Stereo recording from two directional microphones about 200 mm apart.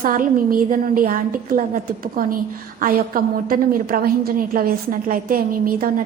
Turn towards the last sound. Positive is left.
turn(degrees=-45)  # may be behind; listen again after turning